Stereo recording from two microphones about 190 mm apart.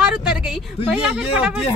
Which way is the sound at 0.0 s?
5° right (ahead or behind).